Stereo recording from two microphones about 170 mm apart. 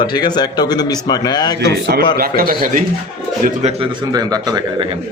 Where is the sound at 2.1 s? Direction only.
60° right (ahead or behind).